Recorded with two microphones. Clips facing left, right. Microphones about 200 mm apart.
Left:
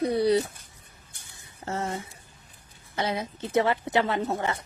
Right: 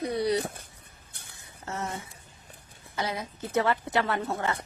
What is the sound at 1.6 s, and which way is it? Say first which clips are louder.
Speech: left 4 dB; 30° left (ahead or behind).